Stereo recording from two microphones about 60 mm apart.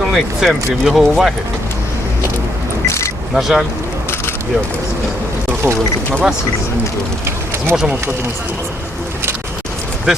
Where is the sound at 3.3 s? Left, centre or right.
Centre.